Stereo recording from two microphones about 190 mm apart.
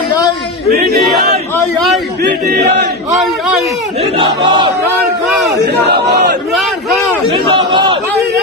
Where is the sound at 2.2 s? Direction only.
60° right (ahead or behind).